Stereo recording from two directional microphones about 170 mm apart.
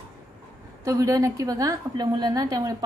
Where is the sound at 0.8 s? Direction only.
20° right (ahead or behind).